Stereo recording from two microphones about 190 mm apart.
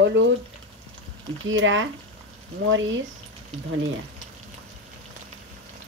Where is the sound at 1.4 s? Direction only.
90° right.